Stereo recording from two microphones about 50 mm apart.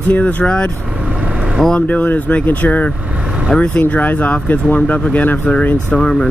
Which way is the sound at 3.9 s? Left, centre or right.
Left.